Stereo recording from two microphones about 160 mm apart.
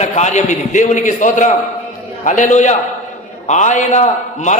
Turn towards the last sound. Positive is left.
turn(degrees=50)  # may be behind; listen again after turning